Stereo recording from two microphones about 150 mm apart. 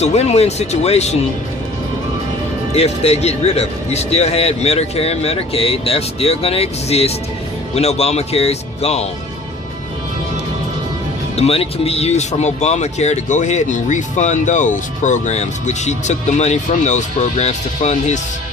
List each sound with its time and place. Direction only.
0.0 s speech: 45° left (ahead or behind)
2.7 s speech: 45° left (ahead or behind)
11.3 s speech: 40° left (ahead or behind)